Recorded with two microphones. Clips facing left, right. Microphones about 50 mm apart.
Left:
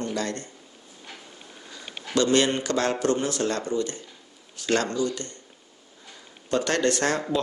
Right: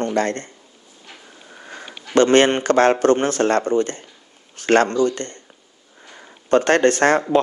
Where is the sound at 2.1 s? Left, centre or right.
Right.